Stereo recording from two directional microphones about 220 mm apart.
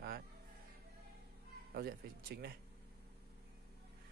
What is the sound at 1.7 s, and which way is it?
Speech, 45° right (ahead or behind).